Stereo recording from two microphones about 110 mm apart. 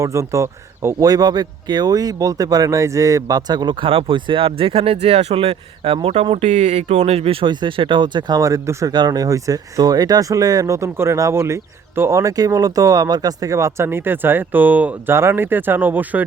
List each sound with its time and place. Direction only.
0.0 s speech: 30° right (ahead or behind)
1.0 s a man's voice: 35° right (ahead or behind)
8.4 s speech: 30° right (ahead or behind)
8.9 s speech: 40° right (ahead or behind); by 16.2 s 15° right (ahead or behind)